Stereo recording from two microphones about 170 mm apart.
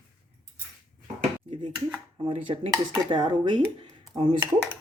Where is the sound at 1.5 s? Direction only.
30° right (ahead or behind).